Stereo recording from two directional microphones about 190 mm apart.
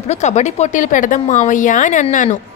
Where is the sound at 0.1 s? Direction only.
35° left (ahead or behind).